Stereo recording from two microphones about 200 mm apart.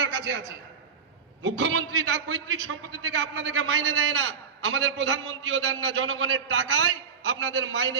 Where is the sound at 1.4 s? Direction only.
75° right (ahead or behind).